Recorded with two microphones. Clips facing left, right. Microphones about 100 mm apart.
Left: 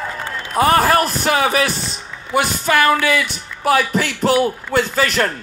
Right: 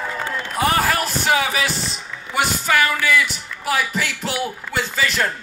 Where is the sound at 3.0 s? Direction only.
50° left (ahead or behind).